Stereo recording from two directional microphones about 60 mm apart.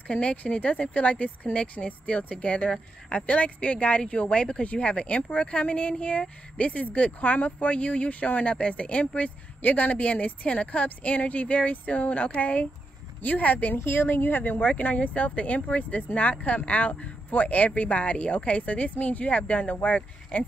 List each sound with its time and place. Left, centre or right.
0.1 s speech: centre
13.7 s speech: left